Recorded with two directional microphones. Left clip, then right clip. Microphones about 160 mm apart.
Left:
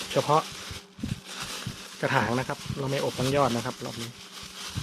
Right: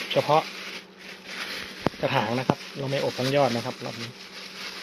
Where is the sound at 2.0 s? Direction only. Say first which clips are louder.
Even; 30° left (ahead or behind).